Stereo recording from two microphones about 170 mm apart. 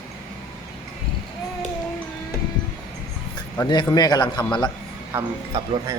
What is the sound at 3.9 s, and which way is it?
Speech, 25° left (ahead or behind).